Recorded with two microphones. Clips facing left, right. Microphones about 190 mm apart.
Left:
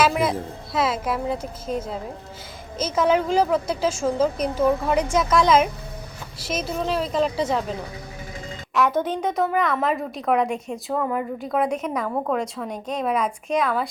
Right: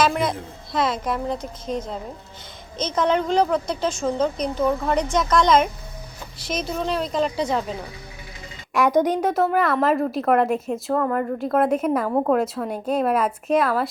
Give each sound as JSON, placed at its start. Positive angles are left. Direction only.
{"t": 0.0, "sound": "a woman's voice", "side_deg": 5}
{"t": 8.7, "sound": "a woman's voice", "side_deg": -15}